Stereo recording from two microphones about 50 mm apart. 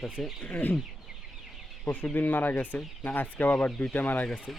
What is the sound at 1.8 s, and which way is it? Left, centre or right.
Speech, left.